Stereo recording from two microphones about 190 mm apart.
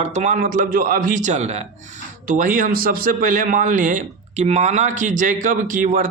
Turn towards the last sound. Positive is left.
turn(degrees=-45)  # may be behind; listen again after turning